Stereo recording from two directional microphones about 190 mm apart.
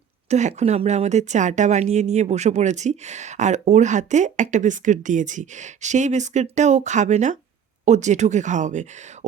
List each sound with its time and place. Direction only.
0.3 s speech: 35° right (ahead or behind)